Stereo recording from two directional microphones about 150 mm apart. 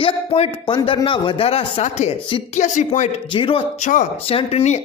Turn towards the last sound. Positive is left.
turn(degrees=45)  # may be behind; listen again after turning